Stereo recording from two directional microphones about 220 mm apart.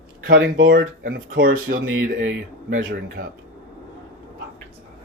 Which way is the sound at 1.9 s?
60° right (ahead or behind).